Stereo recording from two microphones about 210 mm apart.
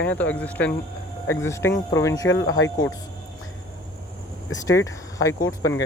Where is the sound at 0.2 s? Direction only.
5° left (ahead or behind).